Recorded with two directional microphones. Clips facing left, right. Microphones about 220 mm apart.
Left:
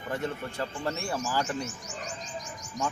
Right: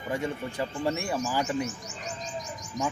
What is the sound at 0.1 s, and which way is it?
A man's voice, 10° right (ahead or behind).